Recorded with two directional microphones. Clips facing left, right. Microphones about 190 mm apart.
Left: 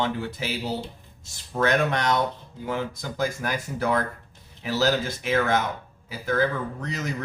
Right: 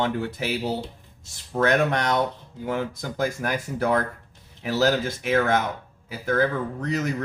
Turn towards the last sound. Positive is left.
turn(degrees=-55)  # may be behind; listen again after turning